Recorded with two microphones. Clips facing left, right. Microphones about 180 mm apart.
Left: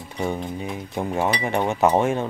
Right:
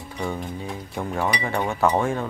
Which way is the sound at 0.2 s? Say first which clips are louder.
Left 3 dB; 20° left (ahead or behind).